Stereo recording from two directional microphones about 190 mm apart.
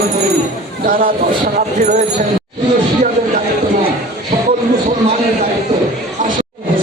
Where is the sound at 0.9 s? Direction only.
45° right (ahead or behind).